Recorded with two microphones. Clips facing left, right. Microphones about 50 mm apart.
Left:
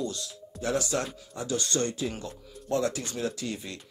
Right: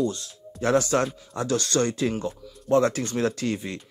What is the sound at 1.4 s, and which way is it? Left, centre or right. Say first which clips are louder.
Speech: right 5 dB; right.